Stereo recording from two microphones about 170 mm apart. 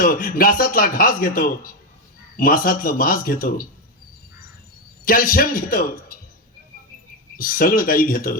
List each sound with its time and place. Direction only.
0.0 s speech: 55° left (ahead or behind)
5.0 s speech: 55° left (ahead or behind)
7.3 s speech: 55° left (ahead or behind)